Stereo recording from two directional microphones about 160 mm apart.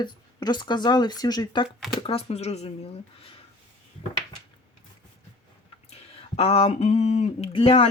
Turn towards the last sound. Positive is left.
turn(degrees=35)  # may be behind; listen again after turning